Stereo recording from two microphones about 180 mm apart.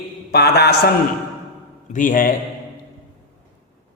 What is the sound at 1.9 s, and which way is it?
Speech, 50° left (ahead or behind).